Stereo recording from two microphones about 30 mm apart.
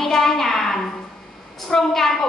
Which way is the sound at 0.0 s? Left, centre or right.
Centre.